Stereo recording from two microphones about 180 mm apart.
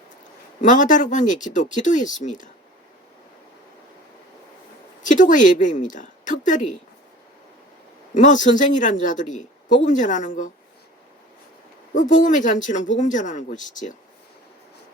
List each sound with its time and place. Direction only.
0.6 s a woman's voice: 45° left (ahead or behind)
5.0 s a woman's voice: 45° left (ahead or behind)
8.1 s a woman's voice: 45° left (ahead or behind)
11.9 s a woman's voice: 45° left (ahead or behind)